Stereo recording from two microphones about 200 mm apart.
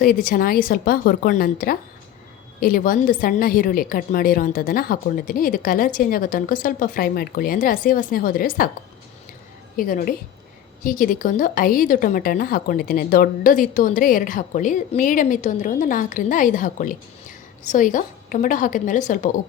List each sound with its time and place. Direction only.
0.0 s a woman's voice: 45° left (ahead or behind)
9.7 s a woman's voice: 45° left (ahead or behind)